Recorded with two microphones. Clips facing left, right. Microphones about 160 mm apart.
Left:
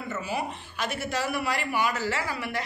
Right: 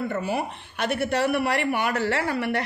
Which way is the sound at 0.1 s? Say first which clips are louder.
Right 4 dB; 60° right (ahead or behind).